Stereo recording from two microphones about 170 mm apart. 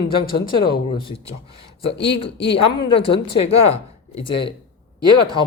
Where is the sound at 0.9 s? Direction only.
30° left (ahead or behind).